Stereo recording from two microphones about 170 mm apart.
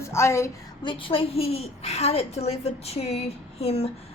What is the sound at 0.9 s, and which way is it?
A woman's voice, 30° left (ahead or behind).